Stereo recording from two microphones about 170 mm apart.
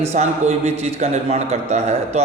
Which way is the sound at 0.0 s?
40° right (ahead or behind).